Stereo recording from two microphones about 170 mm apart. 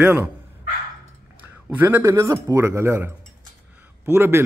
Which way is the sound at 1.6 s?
10° right (ahead or behind).